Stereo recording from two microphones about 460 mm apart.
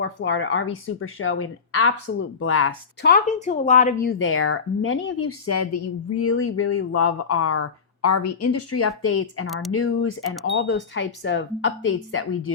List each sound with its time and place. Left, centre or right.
0.0 s speech: left
9.5 s speech: centre
9.7 s speech: left